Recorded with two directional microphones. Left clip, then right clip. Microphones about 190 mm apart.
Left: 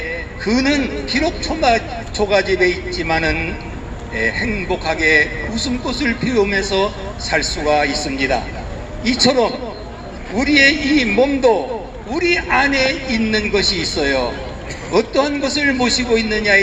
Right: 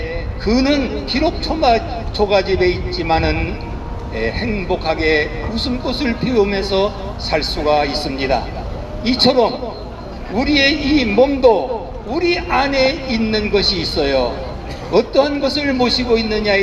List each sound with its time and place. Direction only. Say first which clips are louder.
0.4 s speech: right 1 dB; 20° left (ahead or behind)